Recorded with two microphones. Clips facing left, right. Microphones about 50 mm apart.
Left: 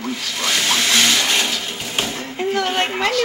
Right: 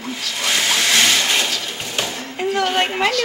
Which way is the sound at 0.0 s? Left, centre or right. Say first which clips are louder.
Left 1 dB; centre.